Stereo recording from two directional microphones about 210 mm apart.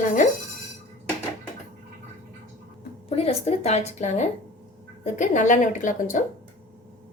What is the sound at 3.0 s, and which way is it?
A woman's voice, 30° left (ahead or behind).